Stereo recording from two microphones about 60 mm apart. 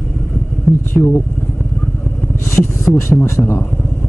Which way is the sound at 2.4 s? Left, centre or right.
Left.